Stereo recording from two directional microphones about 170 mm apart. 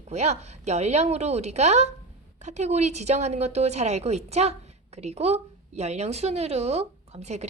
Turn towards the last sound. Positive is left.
turn(degrees=-40)  # may be behind; listen again after turning